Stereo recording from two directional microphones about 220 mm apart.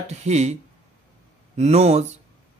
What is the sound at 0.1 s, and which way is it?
Speech, 30° right (ahead or behind).